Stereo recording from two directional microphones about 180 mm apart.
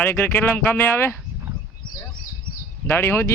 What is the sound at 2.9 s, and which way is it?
Speech, 10° left (ahead or behind).